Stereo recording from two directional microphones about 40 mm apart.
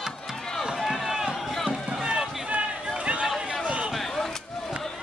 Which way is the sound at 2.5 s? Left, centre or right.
Right.